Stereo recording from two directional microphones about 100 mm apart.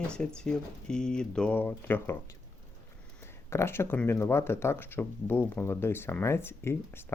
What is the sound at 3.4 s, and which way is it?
Speech, 25° left (ahead or behind).